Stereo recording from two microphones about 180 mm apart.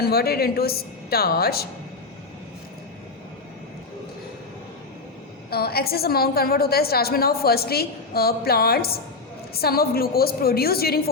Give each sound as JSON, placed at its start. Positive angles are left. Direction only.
{"t": 0.0, "sound": "a woman's voice", "side_deg": 60}
{"t": 5.5, "sound": "a woman's voice", "side_deg": 60}